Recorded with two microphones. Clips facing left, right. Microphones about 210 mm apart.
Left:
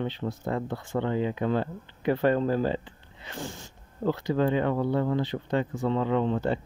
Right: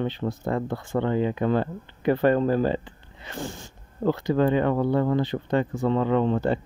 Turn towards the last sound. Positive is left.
turn(degrees=-55)  # may be behind; listen again after turning